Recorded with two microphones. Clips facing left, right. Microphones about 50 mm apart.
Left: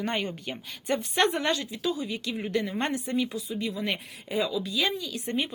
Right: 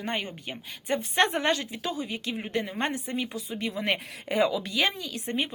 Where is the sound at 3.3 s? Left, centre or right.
Right.